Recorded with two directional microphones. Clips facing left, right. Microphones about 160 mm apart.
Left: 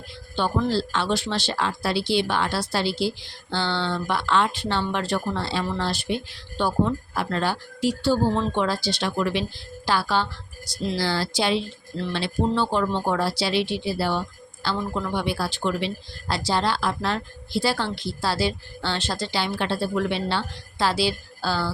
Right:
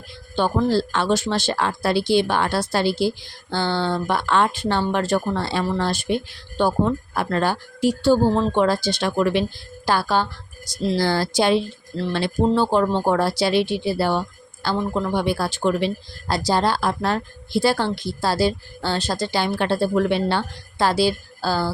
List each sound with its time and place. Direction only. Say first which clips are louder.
0.3 s a woman's voice: right 4 dB; 45° right (ahead or behind)